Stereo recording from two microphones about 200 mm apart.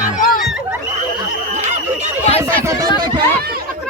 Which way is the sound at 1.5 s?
35° right (ahead or behind).